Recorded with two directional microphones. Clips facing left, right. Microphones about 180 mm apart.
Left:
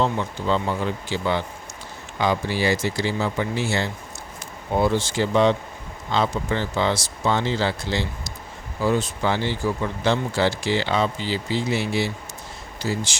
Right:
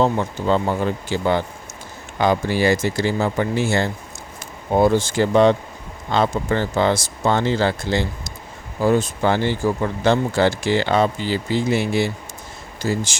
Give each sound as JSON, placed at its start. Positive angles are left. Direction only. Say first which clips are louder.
{"t": 0.0, "sound": "speech", "louder": "right 4 dB", "side_deg": -45}